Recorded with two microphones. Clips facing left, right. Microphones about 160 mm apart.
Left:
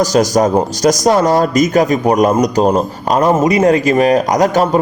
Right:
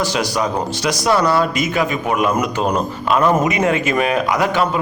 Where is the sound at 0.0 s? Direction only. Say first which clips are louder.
Left 8 dB; 40° left (ahead or behind).